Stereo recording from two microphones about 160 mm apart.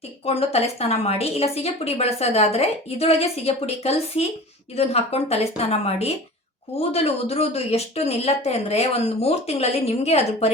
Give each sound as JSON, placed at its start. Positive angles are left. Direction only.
{"t": 0.3, "sound": "a woman's voice", "side_deg": 40}